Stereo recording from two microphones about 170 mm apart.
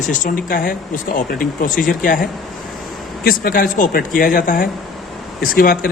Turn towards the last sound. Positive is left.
turn(degrees=60)  # may be behind; listen again after turning